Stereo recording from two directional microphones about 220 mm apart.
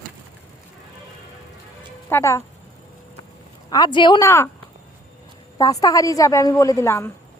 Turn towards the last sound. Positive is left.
turn(degrees=10)  # may be behind; listen again after turning